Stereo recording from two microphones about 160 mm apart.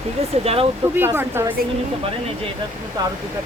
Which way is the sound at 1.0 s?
15° right (ahead or behind).